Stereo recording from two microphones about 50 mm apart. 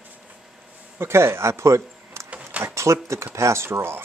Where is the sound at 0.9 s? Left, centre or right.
Right.